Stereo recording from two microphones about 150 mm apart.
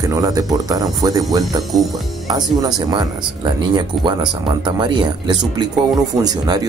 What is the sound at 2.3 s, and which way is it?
Speech, 25° right (ahead or behind).